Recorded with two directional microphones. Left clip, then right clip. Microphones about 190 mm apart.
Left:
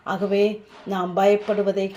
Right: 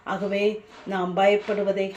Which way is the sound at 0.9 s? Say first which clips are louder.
Left 2 dB; 35° left (ahead or behind).